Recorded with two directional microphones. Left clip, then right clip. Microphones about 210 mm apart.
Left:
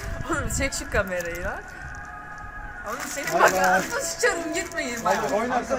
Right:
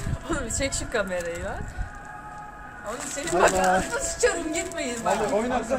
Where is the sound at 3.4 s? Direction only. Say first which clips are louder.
Left 2 dB; 15° right (ahead or behind).